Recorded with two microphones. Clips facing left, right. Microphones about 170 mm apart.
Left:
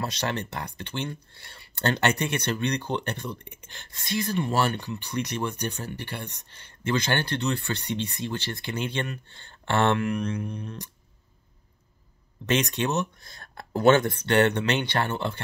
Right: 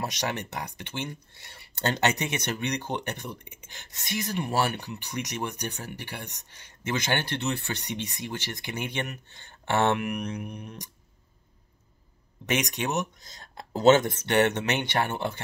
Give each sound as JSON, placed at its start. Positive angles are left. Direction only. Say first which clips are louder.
{"t": 0.0, "sound": "speech", "louder": "left 2 dB", "side_deg": -15}
{"t": 12.4, "sound": "speech", "louder": "left 3 dB", "side_deg": -15}
{"t": 13.2, "sound": "speech", "louder": "left 1 dB", "side_deg": 55}
{"t": 13.6, "sound": "speech", "louder": "even", "side_deg": -20}